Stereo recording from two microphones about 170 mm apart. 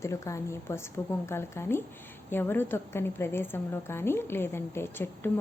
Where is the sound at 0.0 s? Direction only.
15° left (ahead or behind).